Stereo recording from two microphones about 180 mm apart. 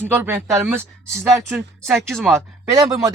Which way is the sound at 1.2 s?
Centre (ahead or behind).